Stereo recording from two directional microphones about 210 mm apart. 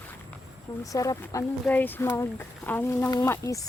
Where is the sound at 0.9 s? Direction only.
15° left (ahead or behind).